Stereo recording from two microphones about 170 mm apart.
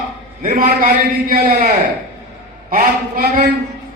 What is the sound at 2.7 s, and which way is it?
Speech, 55° right (ahead or behind).